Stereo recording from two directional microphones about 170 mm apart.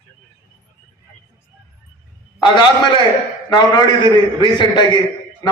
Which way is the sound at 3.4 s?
25° left (ahead or behind).